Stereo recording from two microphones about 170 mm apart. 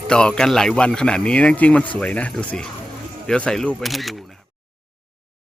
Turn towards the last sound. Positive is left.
turn(degrees=0)  # may be behind; listen again after turning